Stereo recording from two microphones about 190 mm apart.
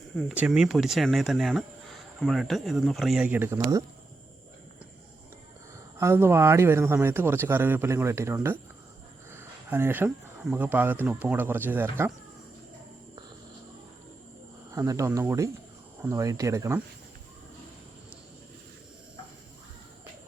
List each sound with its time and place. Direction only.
0.2 s speech: centre (ahead or behind)
6.0 s speech: 15° right (ahead or behind)
14.7 s speech: 15° right (ahead or behind)